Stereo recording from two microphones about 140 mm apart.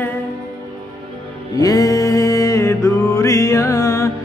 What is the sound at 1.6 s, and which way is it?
Music, 25° left (ahead or behind).